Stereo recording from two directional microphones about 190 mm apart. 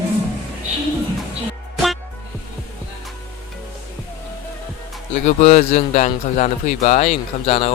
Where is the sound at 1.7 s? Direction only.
Centre (ahead or behind).